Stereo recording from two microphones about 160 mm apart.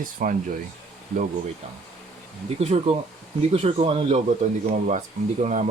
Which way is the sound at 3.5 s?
35° right (ahead or behind).